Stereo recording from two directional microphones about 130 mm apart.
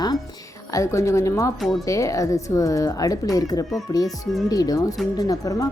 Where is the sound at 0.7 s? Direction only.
25° left (ahead or behind).